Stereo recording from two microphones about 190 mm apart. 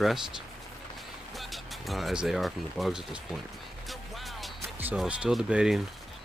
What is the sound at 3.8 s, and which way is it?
Music, centre (ahead or behind).